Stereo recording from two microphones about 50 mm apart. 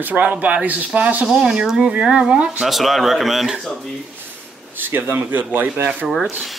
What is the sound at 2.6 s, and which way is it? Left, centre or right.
Speech, centre.